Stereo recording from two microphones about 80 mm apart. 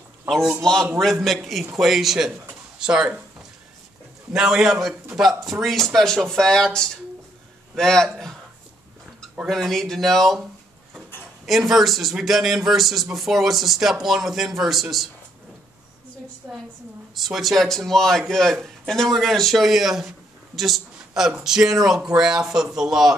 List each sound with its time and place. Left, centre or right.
0.3 s a man's voice: centre
9.5 s a man's voice: centre
11.4 s a man's voice: centre
16.4 s a woman's voice: centre
17.1 s a man's voice: centre